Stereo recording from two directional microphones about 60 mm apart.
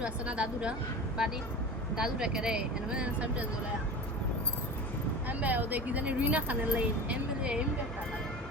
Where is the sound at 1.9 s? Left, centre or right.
Centre.